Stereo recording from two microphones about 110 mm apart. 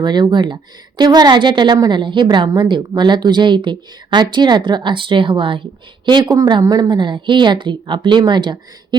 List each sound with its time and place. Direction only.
0.0 s a woman's voice: 40° right (ahead or behind)